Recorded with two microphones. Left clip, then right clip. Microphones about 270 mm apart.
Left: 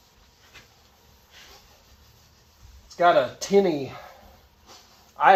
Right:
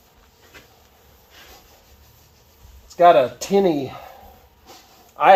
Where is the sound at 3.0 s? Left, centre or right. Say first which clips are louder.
Right 6 dB; right.